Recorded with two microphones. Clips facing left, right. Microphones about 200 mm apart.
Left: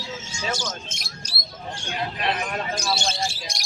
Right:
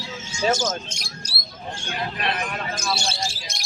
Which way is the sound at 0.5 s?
45° right (ahead or behind).